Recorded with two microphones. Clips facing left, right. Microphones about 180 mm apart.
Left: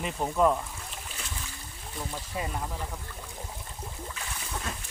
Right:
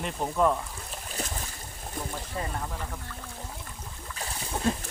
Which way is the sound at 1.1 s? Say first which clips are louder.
Right 6 dB; 40° right (ahead or behind).